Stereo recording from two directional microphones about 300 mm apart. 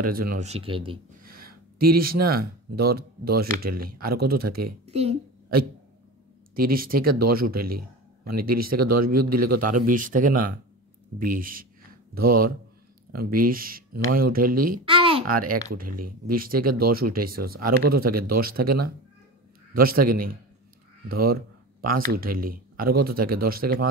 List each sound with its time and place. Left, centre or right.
0.1 s speech: right
1.2 s speech: right
6.5 s speech: right
7.6 s a sound: right
8.5 s speech: right
14.9 s a sound: centre
15.7 s speech: right